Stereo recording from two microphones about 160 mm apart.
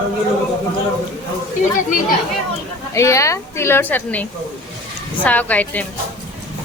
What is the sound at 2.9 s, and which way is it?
A woman's voice, 20° left (ahead or behind).